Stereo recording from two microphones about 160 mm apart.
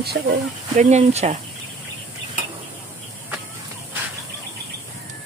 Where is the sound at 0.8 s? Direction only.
45° right (ahead or behind).